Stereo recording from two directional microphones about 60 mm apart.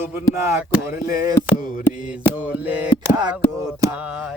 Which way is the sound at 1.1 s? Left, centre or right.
Right.